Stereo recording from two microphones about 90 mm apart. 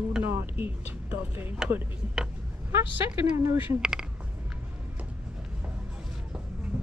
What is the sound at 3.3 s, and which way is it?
Speech, 35° right (ahead or behind).